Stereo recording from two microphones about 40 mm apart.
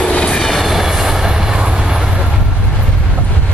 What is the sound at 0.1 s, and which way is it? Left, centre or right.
Vehicle, left.